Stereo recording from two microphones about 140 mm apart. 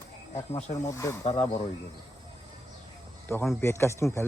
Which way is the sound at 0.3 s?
55° left (ahead or behind).